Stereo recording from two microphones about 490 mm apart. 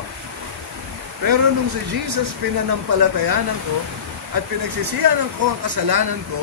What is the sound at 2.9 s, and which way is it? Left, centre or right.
Speech, right.